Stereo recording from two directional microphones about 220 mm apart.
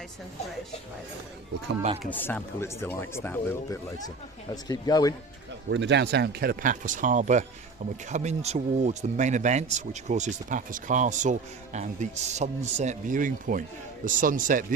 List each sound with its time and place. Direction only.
2.0 s speech: 10° left (ahead or behind)
5.7 s speech: 55° right (ahead or behind); by 14.6 s 35° right (ahead or behind)